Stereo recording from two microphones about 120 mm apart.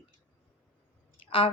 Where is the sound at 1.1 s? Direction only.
50° left (ahead or behind).